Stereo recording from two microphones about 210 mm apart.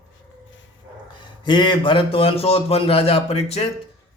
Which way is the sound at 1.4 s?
20° left (ahead or behind).